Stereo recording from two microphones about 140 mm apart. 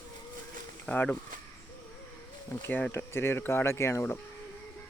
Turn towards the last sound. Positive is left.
turn(degrees=20)  # may be behind; listen again after turning